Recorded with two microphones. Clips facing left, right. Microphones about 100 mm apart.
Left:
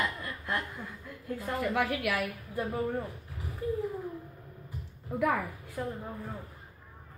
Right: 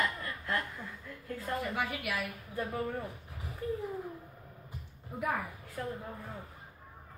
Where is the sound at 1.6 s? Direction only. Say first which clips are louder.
Left 6 dB; 85° left.